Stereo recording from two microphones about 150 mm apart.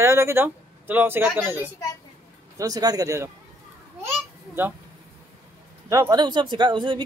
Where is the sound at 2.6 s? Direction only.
25° right (ahead or behind).